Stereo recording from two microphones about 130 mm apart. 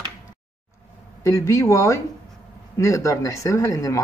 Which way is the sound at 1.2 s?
25° left (ahead or behind).